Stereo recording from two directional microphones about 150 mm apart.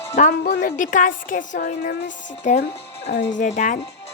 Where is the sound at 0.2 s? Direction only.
50° left (ahead or behind).